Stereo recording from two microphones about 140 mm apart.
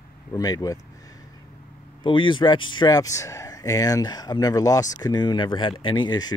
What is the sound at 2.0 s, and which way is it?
Speech, 35° left (ahead or behind).